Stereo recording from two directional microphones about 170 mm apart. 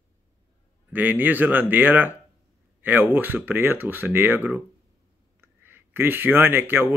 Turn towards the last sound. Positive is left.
turn(degrees=-10)  # may be behind; listen again after turning